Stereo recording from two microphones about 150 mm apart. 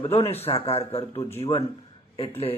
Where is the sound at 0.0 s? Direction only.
40° left (ahead or behind).